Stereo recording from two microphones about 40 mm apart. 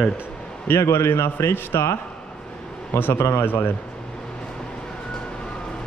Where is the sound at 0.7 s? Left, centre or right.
Left.